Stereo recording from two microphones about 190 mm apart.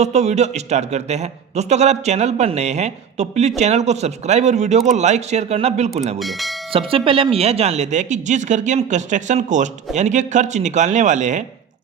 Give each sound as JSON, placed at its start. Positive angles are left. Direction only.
{"t": 0.0, "sound": "a man's voice", "side_deg": -35}
{"t": 6.1, "sound": "speech", "side_deg": 0}
{"t": 6.7, "sound": "a man's voice", "side_deg": -30}